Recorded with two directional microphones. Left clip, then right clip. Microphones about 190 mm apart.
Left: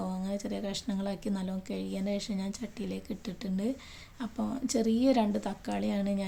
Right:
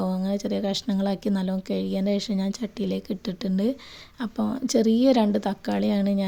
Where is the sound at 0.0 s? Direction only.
30° right (ahead or behind).